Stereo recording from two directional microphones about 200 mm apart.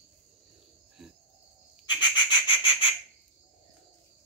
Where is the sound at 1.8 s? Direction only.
25° left (ahead or behind).